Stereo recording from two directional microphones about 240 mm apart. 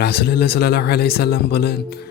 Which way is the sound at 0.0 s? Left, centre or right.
Left.